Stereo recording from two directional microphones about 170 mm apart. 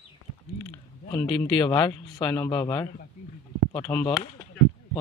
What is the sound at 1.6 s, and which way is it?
Speech, 20° left (ahead or behind).